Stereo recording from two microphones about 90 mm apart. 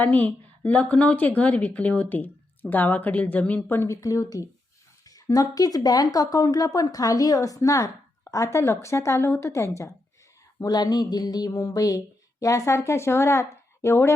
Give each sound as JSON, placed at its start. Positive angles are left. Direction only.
{"t": 0.0, "sound": "a woman's voice", "side_deg": 20}
{"t": 10.6, "sound": "speech", "side_deg": 45}